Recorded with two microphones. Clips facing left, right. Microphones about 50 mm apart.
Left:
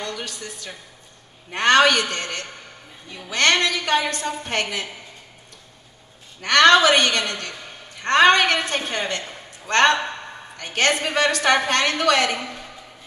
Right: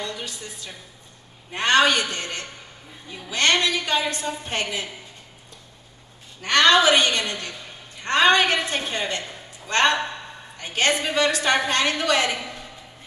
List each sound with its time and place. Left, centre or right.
0.0 s a woman's voice: left
6.4 s a woman's voice: left